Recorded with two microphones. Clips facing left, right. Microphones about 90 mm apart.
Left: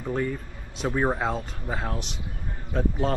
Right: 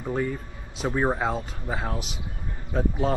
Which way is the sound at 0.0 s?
5° right (ahead or behind).